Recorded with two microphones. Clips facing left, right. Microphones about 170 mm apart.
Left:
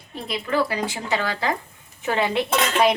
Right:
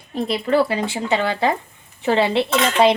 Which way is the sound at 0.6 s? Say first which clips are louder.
Right 4 dB; 25° right (ahead or behind).